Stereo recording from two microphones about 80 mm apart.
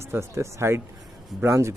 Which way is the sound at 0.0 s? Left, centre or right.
Right.